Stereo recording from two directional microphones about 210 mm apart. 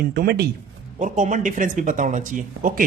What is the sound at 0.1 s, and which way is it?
Speech, 50° right (ahead or behind).